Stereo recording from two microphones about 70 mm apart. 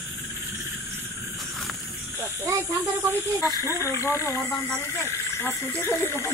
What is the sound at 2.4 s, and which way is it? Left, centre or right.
Speech, right.